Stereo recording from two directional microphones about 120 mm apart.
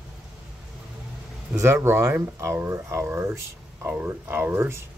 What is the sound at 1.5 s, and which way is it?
Speech, 20° right (ahead or behind).